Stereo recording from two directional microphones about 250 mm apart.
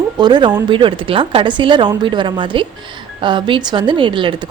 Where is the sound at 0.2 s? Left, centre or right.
Centre.